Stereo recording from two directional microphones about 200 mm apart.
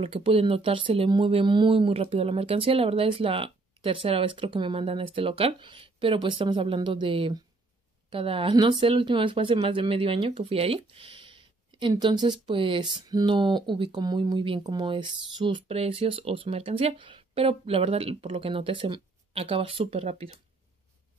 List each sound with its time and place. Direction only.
0.0 s speech: 30° right (ahead or behind)